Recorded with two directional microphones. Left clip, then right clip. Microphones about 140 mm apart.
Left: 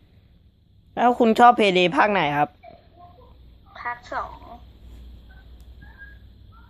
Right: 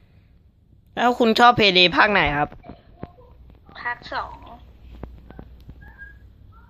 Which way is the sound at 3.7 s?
Centre (ahead or behind).